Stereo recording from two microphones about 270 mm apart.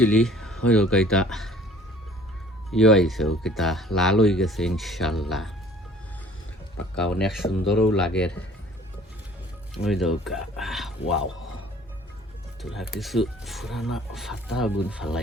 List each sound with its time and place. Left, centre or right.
0.0 s speech: centre
2.6 s speech: centre
6.9 s speech: centre
7.6 s speech: left
7.9 s speech: centre
9.7 s speech: centre
12.7 s speech: centre